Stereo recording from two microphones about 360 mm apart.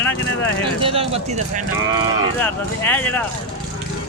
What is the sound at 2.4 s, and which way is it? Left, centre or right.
Speech, centre.